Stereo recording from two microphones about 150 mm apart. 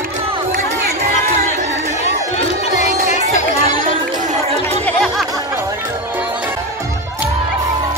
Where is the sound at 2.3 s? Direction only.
50° left (ahead or behind).